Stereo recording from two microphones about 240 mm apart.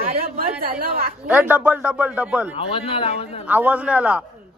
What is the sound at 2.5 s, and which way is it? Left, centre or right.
Speech, left.